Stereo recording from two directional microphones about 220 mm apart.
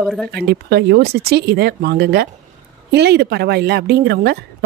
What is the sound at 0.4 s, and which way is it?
Speech, 50° right (ahead or behind).